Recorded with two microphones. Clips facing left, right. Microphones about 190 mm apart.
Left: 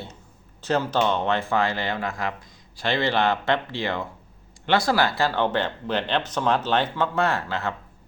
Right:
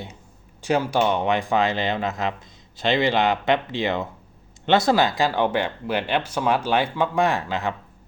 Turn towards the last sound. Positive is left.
turn(degrees=-15)  # may be behind; listen again after turning